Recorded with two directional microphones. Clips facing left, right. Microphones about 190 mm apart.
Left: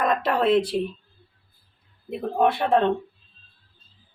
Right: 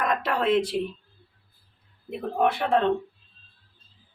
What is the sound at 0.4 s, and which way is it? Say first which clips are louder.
Speech: left 2 dB; 30° left (ahead or behind).